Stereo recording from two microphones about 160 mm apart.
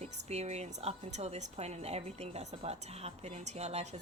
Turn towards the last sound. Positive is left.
turn(degrees=-40)  # may be behind; listen again after turning